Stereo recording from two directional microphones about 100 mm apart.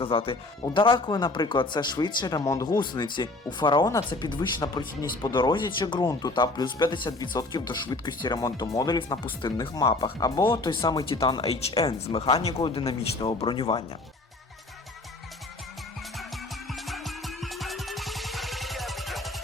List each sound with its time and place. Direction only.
0.0 s speech: 65° left (ahead or behind); by 2.7 s 35° left (ahead or behind)
2.7 s speech: 50° left (ahead or behind)
6.0 s speech: 35° left (ahead or behind)
6.3 s speech: 50° left (ahead or behind)
9.6 s speech: 35° left (ahead or behind)
10.5 s speech: 55° left (ahead or behind)
11.8 s speech: 90° left
12.6 s speech: 60° left (ahead or behind); by 13.5 s 75° left (ahead or behind)
13.5 s speech: 60° left (ahead or behind)
16.1 s music: centre (ahead or behind)